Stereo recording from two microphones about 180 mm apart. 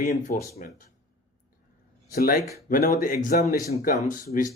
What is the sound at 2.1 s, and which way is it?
Speech, 55° left (ahead or behind).